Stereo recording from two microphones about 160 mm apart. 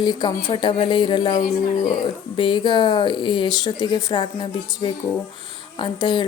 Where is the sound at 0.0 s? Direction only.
25° left (ahead or behind).